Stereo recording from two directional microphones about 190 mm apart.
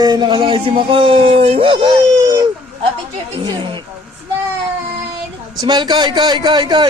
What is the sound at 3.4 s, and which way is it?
Speech, 25° right (ahead or behind).